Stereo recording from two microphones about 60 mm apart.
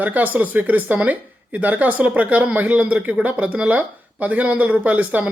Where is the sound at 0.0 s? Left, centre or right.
Right.